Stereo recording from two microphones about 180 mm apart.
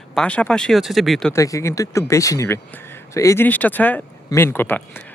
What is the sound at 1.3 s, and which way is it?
Speech, 15° left (ahead or behind).